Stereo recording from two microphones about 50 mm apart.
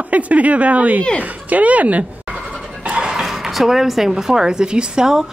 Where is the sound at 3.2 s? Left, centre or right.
Centre.